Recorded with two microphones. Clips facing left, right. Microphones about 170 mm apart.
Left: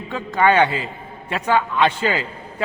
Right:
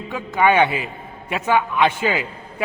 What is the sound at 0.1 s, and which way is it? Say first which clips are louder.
A man's voice: even; 15° right (ahead or behind).